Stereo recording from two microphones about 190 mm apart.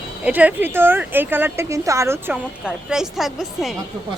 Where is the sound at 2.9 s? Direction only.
Centre (ahead or behind).